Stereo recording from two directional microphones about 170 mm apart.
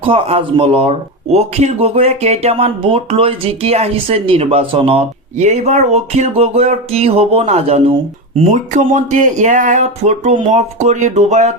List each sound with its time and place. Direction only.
0.0 s speech: 35° right (ahead or behind)